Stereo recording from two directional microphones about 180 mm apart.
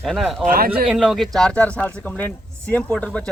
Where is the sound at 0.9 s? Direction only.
Centre (ahead or behind).